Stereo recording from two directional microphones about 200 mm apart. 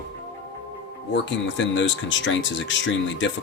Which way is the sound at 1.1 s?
65° left (ahead or behind).